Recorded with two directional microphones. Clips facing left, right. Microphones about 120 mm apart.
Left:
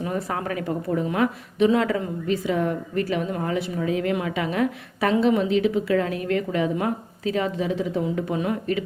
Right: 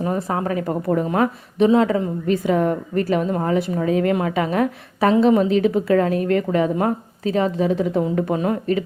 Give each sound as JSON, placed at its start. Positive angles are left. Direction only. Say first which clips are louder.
{"t": 0.3, "sound": "speech", "louder": "right 5 dB", "side_deg": -30}
{"t": 0.7, "sound": "a woman's voice", "louder": "right 4 dB", "side_deg": -60}
{"t": 1.1, "sound": "a woman's voice", "louder": "right 3 dB", "side_deg": -40}
{"t": 1.7, "sound": "speech", "louder": "right 5 dB", "side_deg": -25}
{"t": 2.2, "sound": "a woman's voice", "louder": "right 5 dB", "side_deg": -50}
{"t": 8.4, "sound": "a woman's voice", "louder": "right 4 dB", "side_deg": -40}